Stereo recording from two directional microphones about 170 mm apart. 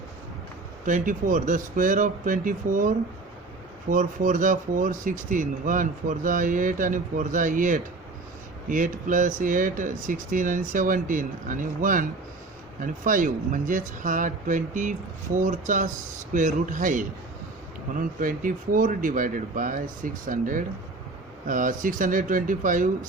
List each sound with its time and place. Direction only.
0.9 s speech: 50° right (ahead or behind)